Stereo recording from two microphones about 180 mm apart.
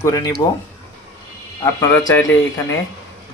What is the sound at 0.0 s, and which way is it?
Speech, 20° left (ahead or behind).